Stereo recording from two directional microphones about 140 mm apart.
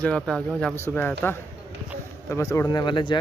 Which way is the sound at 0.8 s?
15° left (ahead or behind).